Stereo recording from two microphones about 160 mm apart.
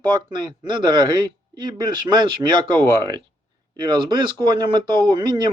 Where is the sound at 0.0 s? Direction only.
25° right (ahead or behind).